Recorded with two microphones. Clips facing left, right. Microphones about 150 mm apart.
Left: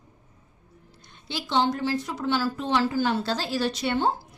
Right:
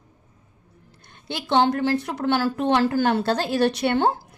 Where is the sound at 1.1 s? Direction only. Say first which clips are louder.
Right 5 dB; 55° right (ahead or behind).